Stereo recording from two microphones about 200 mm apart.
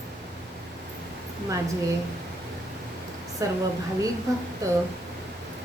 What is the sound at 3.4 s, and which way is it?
Speech, 15° right (ahead or behind).